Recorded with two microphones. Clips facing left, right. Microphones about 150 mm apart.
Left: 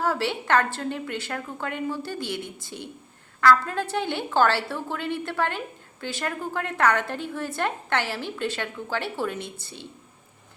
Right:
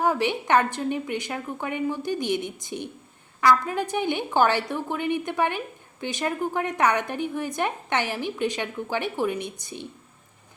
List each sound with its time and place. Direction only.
0.0 s a woman's voice: 15° right (ahead or behind)